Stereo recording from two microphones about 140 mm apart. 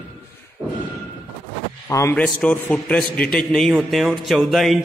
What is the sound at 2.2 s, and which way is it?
A man's voice, 5° left (ahead or behind).